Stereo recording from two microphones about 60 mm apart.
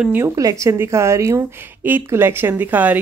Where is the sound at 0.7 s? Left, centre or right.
Right.